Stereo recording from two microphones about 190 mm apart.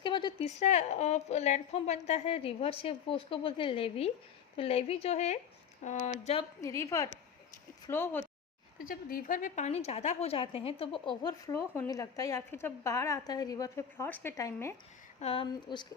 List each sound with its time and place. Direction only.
0.0 s a woman's voice: 25° left (ahead or behind)
6.6 s a woman's voice: 15° left (ahead or behind)
8.8 s a woman's voice: 50° left (ahead or behind); by 14.8 s 15° left (ahead or behind)
15.2 s speech: 30° left (ahead or behind)